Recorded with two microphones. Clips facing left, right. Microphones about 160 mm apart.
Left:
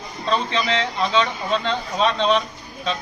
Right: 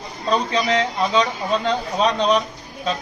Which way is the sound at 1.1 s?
15° right (ahead or behind).